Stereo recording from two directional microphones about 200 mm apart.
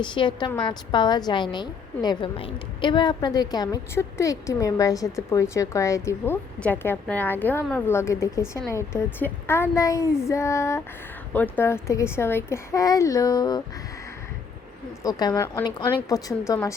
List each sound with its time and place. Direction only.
0.0 s a woman's voice: 25° left (ahead or behind)
15.0 s a woman's voice: 20° left (ahead or behind)